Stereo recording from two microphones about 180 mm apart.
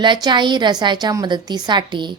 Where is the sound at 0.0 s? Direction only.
25° right (ahead or behind).